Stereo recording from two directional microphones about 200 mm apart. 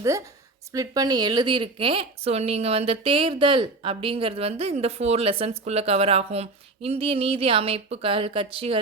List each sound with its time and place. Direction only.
0.0 s a woman's voice: 15° right (ahead or behind)